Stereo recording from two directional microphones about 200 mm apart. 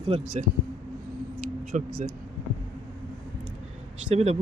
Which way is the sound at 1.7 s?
40° right (ahead or behind).